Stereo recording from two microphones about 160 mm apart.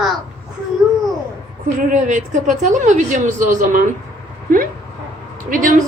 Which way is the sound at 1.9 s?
50° right (ahead or behind).